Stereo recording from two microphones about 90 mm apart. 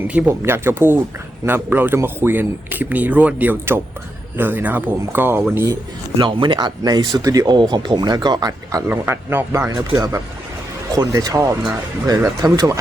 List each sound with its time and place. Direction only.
0.1 s speech: 15° right (ahead or behind)
0.4 s speech: 25° right (ahead or behind)
6.1 s speech: 65° right (ahead or behind)
7.2 s speech: 40° right (ahead or behind)
8.9 s speech: 25° right (ahead or behind); by 12.8 s 40° right (ahead or behind)